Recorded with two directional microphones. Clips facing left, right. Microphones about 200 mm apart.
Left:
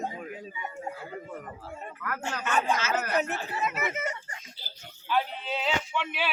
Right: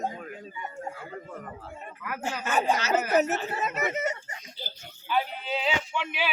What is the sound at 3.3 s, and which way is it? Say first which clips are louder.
Speech: right 2 dB; 45° right (ahead or behind).